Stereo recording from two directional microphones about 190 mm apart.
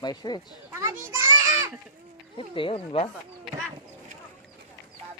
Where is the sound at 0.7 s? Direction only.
15° right (ahead or behind).